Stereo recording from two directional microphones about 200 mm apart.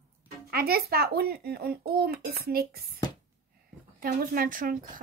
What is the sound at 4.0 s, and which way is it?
Speech, 45° right (ahead or behind).